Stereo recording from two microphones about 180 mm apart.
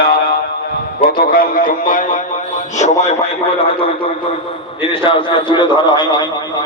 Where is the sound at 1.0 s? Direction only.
50° left (ahead or behind).